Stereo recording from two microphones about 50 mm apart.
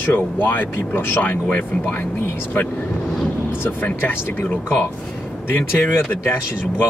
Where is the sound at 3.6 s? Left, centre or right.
Left.